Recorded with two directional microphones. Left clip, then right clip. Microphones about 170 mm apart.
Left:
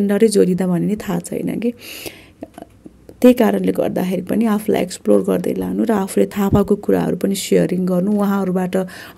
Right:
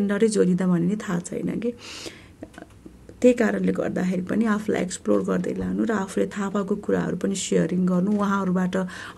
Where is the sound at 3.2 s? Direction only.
30° left (ahead or behind).